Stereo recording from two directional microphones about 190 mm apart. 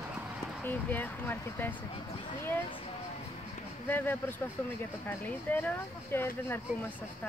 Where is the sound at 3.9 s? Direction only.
10° left (ahead or behind).